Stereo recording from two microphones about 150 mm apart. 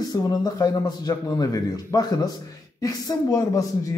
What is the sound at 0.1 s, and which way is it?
A man's voice, 25° left (ahead or behind).